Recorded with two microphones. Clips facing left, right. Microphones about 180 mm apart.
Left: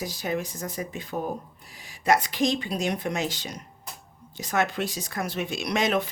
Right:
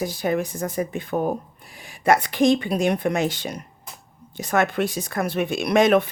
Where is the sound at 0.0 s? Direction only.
55° right (ahead or behind).